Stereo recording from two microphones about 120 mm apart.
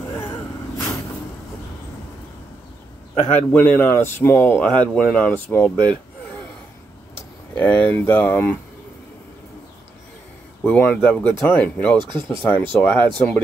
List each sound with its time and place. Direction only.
3.3 s speech: 15° left (ahead or behind)
4.6 s speech: 5° left (ahead or behind)
7.5 s speech: 15° left (ahead or behind)
10.6 s speech: 10° left (ahead or behind)
12.0 s speech: 40° right (ahead or behind)
12.4 s speech: 15° left (ahead or behind)